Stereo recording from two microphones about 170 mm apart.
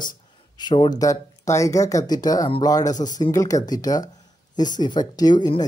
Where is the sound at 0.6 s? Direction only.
25° left (ahead or behind).